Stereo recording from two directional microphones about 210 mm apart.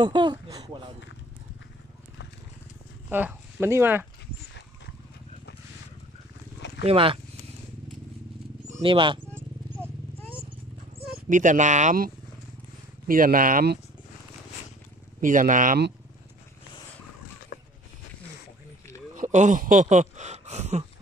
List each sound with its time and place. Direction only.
0.0 s speech: 20° right (ahead or behind)
3.1 s speech: 10° right (ahead or behind)
6.8 s speech: 25° right (ahead or behind)
8.6 s speech: 30° right (ahead or behind)
11.1 s speech: 40° right (ahead or behind)
15.1 s speech: 40° right (ahead or behind)
17.5 s a sound: 50° left (ahead or behind)
19.1 s a sound: 35° right (ahead or behind)